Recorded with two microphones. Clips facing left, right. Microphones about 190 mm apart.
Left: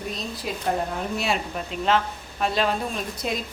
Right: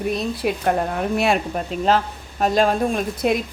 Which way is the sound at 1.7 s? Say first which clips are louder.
Right 3 dB; 40° right (ahead or behind).